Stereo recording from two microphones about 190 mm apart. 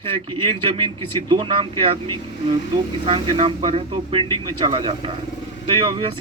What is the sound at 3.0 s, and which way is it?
Speech, 30° right (ahead or behind).